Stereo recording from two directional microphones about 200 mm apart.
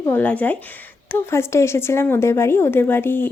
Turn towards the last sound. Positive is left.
turn(degrees=10)  # may be behind; listen again after turning